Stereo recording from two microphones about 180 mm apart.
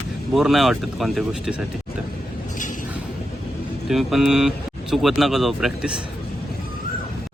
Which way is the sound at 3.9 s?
Centre (ahead or behind).